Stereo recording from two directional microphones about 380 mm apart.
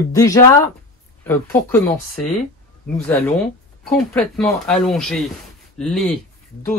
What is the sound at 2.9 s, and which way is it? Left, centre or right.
Speech, centre.